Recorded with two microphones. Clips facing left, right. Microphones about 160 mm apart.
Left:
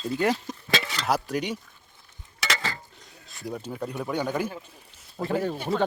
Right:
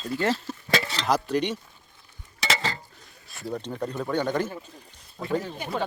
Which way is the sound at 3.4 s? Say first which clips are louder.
Right 2 dB; 10° left (ahead or behind).